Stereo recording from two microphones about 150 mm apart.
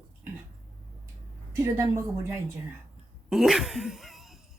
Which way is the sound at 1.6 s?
20° right (ahead or behind).